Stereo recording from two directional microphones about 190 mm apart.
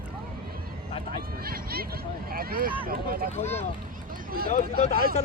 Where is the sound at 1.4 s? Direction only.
50° right (ahead or behind).